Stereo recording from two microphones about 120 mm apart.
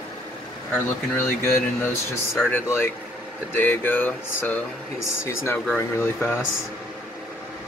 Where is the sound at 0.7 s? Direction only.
20° left (ahead or behind).